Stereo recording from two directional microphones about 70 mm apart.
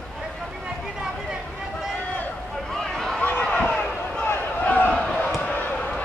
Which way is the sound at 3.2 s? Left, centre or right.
Left.